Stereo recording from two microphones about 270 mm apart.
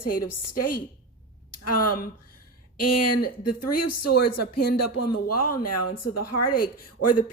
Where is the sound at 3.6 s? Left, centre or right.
Left.